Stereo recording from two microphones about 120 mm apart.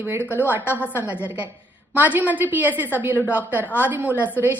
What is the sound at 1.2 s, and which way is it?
Speech, 15° right (ahead or behind).